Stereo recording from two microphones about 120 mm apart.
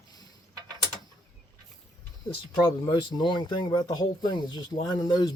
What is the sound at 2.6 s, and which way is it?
Speech, 40° left (ahead or behind).